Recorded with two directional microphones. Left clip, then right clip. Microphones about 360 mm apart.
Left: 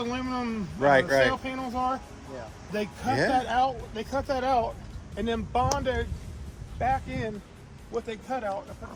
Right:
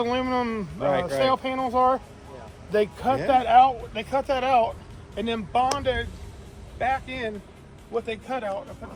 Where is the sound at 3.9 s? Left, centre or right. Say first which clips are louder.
Right 4 dB; right.